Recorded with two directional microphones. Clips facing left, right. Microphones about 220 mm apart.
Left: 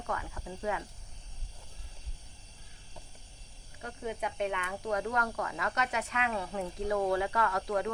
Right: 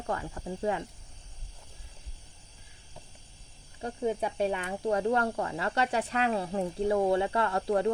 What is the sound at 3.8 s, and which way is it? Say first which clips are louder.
Speech: right 7 dB; 35° right (ahead or behind).